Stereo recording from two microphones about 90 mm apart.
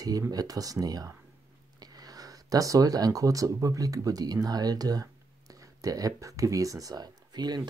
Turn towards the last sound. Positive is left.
turn(degrees=-50)  # may be behind; listen again after turning